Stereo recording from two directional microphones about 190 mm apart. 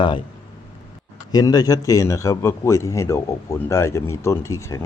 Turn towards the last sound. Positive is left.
turn(degrees=15)  # may be behind; listen again after turning